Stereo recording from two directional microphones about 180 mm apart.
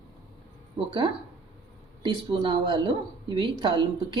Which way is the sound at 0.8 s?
25° right (ahead or behind).